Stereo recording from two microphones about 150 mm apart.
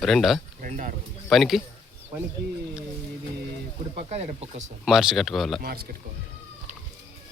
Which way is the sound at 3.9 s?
45° right (ahead or behind).